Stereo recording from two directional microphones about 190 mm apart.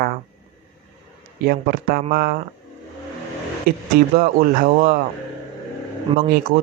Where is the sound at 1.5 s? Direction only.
50° right (ahead or behind).